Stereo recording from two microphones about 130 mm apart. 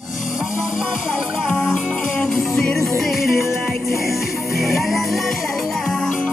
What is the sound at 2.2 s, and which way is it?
Music, centre (ahead or behind).